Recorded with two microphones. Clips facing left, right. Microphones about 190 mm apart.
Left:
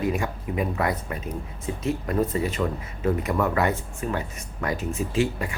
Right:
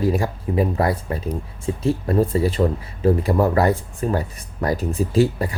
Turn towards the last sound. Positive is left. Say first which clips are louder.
# right 6 dB
turn(degrees=-35)  # may be behind; listen again after turning